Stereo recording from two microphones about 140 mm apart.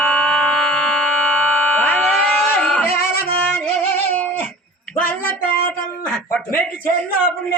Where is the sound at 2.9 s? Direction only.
90° left.